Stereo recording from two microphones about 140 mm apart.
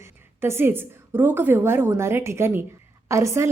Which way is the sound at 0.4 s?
15° right (ahead or behind).